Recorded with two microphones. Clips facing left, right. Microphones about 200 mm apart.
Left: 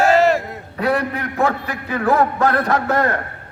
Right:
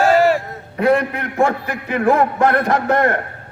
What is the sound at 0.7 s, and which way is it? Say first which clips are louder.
A man's voice: right 4 dB; 20° right (ahead or behind).